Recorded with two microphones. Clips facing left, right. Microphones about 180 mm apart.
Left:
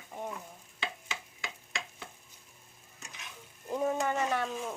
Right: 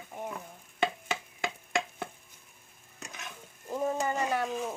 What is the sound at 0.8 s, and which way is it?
Stir, 55° right (ahead or behind).